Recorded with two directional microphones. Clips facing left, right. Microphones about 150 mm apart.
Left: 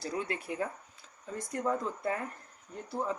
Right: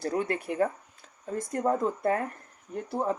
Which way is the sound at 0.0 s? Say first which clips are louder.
Right 6 dB; 55° right (ahead or behind).